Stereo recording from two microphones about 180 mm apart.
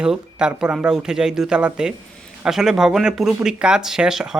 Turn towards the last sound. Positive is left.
turn(degrees=-5)  # may be behind; listen again after turning